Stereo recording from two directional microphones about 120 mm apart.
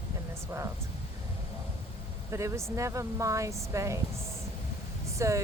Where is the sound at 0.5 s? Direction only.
20° right (ahead or behind).